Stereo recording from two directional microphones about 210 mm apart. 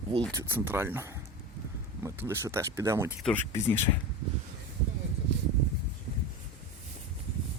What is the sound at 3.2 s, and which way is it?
Speech, 5° left (ahead or behind).